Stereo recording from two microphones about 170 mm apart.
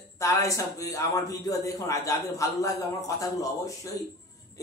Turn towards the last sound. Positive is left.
turn(degrees=20)  # may be behind; listen again after turning